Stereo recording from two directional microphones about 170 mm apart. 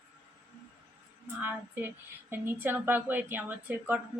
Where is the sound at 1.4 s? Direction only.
10° right (ahead or behind).